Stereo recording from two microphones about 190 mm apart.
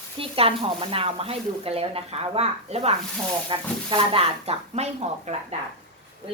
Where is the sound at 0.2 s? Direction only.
30° right (ahead or behind).